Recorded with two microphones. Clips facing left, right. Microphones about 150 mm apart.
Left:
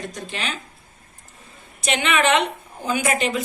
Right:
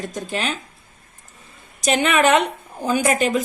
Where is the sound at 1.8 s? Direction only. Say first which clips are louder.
Right 3 dB; 40° right (ahead or behind).